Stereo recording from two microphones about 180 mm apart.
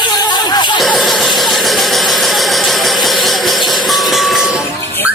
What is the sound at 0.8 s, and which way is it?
Vehicle, centre (ahead or behind).